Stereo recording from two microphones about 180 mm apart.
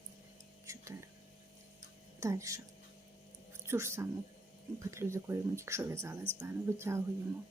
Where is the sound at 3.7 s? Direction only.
15° right (ahead or behind).